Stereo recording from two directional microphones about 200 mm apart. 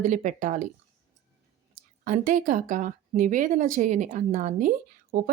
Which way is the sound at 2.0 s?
40° right (ahead or behind).